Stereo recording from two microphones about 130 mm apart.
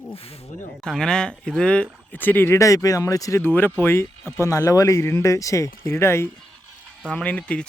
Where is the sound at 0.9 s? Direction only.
5° left (ahead or behind).